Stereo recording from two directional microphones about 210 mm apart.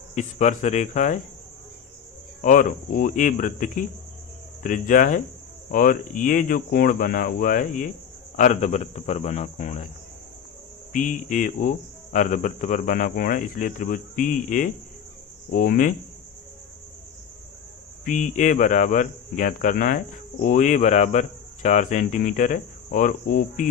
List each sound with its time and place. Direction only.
0.1 s speech: 35° left (ahead or behind)
2.4 s speech: 40° left (ahead or behind)
10.9 s speech: 40° left (ahead or behind)
18.0 s speech: 35° left (ahead or behind)